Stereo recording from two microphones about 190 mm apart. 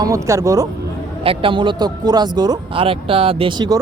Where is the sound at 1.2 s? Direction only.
30° right (ahead or behind).